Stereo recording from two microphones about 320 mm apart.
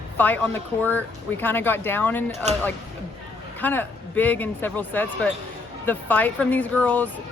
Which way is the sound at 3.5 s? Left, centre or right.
Centre.